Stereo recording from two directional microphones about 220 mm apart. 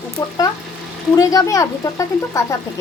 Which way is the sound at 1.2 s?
15° left (ahead or behind).